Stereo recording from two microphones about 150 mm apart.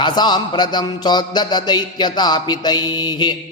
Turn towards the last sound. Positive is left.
turn(degrees=30)  # may be behind; listen again after turning